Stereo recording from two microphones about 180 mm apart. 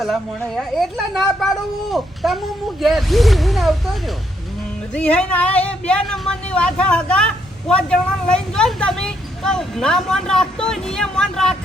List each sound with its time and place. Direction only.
0.0 s a woman's voice: centre (ahead or behind)